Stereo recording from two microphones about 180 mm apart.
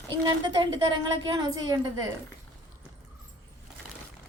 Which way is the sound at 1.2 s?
25° right (ahead or behind).